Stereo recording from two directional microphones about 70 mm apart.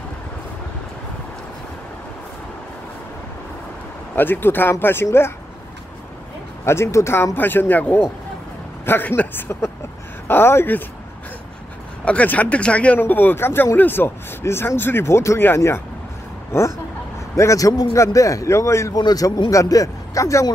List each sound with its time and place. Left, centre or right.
4.1 s speech: left
6.6 s speech: left
7.3 s speech: left
12.0 s speech: centre; by 15.8 s left
17.4 s a man's voice: left
18.9 s a man's voice: left
19.2 s a man's voice: left